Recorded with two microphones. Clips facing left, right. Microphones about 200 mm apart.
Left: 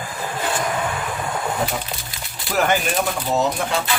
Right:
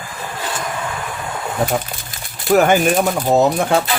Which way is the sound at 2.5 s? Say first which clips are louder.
Right 7 dB; 50° right (ahead or behind).